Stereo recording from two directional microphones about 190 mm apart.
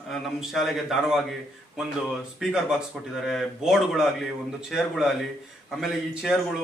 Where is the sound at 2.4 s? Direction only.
5° right (ahead or behind).